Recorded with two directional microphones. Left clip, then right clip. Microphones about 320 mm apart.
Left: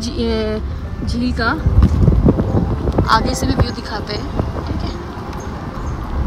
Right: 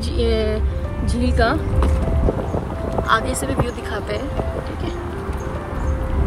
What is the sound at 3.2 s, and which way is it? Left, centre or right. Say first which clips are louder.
Speech: left 3 dB; left.